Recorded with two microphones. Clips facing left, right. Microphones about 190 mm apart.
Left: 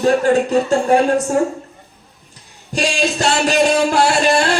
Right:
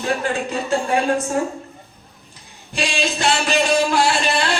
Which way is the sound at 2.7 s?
45° left (ahead or behind).